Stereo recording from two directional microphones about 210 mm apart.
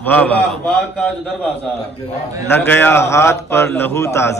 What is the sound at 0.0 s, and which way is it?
A man's voice, 10° left (ahead or behind).